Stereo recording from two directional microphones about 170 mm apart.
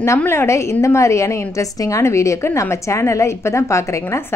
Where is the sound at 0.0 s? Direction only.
15° left (ahead or behind).